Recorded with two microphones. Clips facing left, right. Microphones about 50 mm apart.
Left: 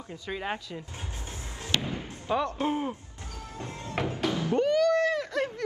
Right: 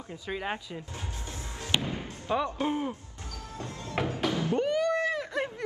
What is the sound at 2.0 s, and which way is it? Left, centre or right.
Slam, left.